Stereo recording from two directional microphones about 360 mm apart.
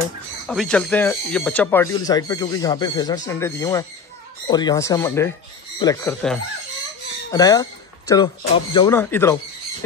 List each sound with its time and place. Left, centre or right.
0.5 s speech: centre